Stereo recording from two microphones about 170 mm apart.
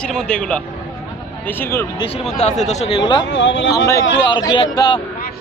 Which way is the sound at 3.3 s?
90° left.